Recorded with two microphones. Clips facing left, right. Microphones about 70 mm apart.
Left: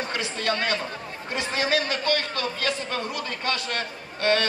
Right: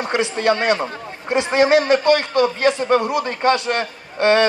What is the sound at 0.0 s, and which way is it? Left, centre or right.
Speech, right.